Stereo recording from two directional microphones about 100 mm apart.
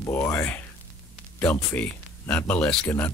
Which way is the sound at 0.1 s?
25° left (ahead or behind).